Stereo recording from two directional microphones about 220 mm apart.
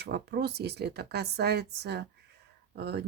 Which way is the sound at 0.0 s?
45° right (ahead or behind).